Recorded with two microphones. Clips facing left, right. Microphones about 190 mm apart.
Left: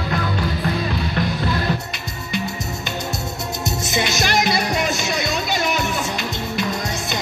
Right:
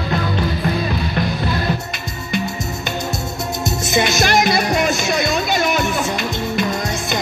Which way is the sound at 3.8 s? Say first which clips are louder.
Right 5 dB; 50° right (ahead or behind).